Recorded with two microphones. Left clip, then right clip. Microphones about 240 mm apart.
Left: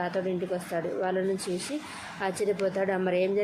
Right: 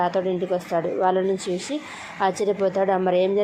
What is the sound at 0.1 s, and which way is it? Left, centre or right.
Speech, centre.